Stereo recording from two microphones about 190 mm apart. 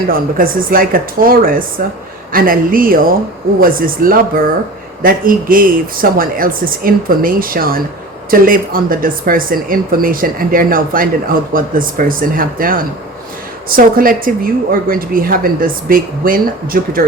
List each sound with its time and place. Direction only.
0.1 s a woman's voice: 50° right (ahead or behind)